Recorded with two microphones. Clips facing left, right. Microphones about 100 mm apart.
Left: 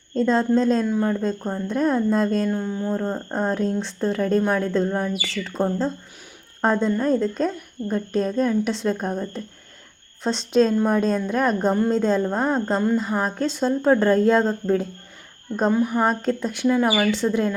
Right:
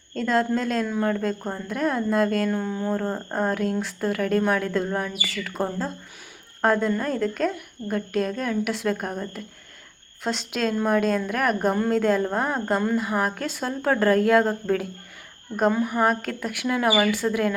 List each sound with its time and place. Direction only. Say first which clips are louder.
0.1 s a woman's voice: left 4 dB; 25° left (ahead or behind)
2.9 s a sound: left 1 dB; 15° left (ahead or behind)
3.3 s a woman's voice: left 1 dB; 25° left (ahead or behind)
10.2 s a woman's voice: left 7 dB; 30° left (ahead or behind)